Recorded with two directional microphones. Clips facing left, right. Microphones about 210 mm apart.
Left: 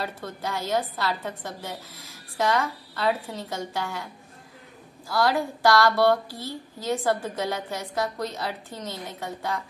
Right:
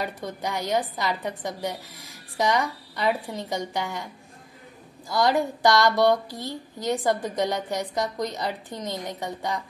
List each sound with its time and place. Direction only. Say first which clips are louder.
0.0 s speech: right 2 dB; 15° right (ahead or behind)